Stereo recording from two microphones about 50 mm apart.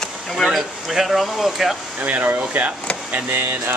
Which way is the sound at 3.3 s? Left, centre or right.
Right.